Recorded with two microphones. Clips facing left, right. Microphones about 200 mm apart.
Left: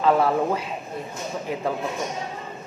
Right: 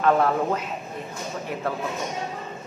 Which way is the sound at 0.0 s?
10° left (ahead or behind).